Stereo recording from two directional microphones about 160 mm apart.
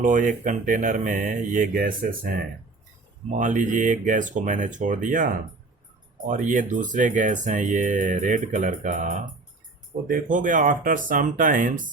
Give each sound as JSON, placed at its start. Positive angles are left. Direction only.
{"t": 0.0, "sound": "speech", "side_deg": -55}
{"t": 3.2, "sound": "speech", "side_deg": -50}